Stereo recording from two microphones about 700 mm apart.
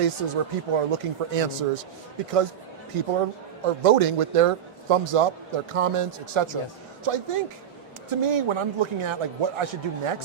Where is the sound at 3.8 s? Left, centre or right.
Right.